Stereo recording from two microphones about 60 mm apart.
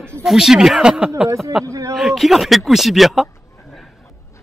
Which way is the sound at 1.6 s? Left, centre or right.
Right.